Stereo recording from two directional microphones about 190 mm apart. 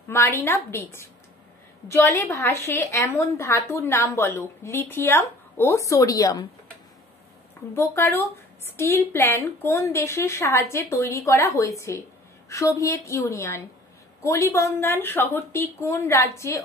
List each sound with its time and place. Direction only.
0.1 s a woman's voice: 15° left (ahead or behind)
7.7 s a woman's voice: 15° left (ahead or behind)